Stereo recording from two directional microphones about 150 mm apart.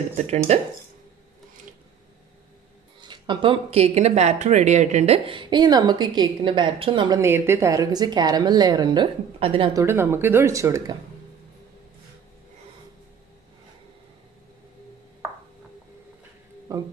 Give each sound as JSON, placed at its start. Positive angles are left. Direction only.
{"t": 3.0, "sound": "speech", "side_deg": -30}
{"t": 7.2, "sound": "a woman's voice", "side_deg": -15}
{"t": 9.8, "sound": "a woman's voice", "side_deg": -15}
{"t": 16.7, "sound": "speech", "side_deg": -20}